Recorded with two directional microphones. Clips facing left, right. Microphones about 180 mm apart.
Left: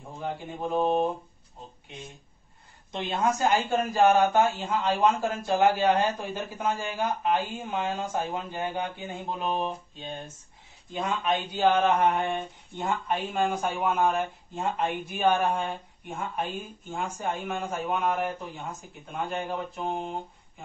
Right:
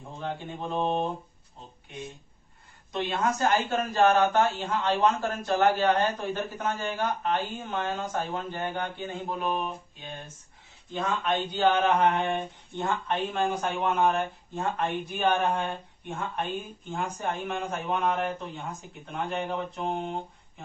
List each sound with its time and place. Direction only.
0.2 s a man's voice: 10° left (ahead or behind)
3.2 s a man's voice: 15° left (ahead or behind)
9.3 s mantra: 25° left (ahead or behind)
10.9 s a man's voice: 10° left (ahead or behind)
14.5 s a man's voice: 15° left (ahead or behind)